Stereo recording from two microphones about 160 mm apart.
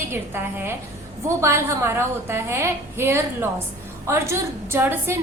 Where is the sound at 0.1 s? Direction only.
15° right (ahead or behind).